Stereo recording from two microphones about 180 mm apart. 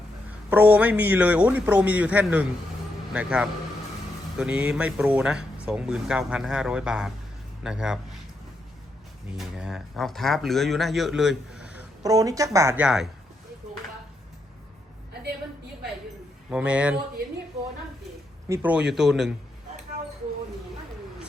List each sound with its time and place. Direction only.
0.3 s a man's voice: 10° right (ahead or behind)
9.4 s speech: 5° right (ahead or behind)
12.0 s a man's voice: 20° right (ahead or behind)
16.5 s a man's voice: 5° right (ahead or behind)
18.4 s speech: 10° right (ahead or behind)